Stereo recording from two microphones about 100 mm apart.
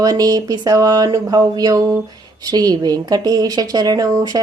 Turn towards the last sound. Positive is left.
turn(degrees=-35)  # may be behind; listen again after turning